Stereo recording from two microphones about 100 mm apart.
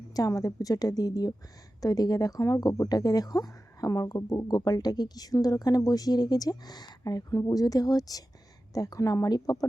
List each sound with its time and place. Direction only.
0.1 s speech: 35° left (ahead or behind)